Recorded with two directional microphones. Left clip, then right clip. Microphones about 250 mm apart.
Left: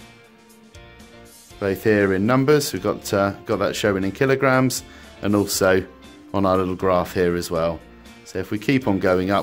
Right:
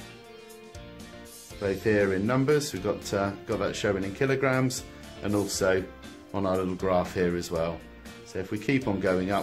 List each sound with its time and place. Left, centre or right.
1.6 s speech: left